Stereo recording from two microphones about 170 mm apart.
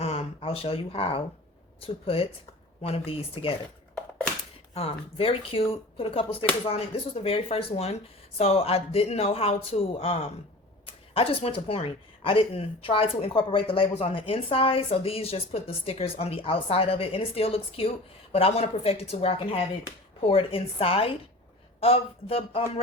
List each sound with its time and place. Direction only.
0.0 s a sound: 35° left (ahead or behind)
1.8 s speech: 35° left (ahead or behind)
4.7 s speech: 35° left (ahead or behind)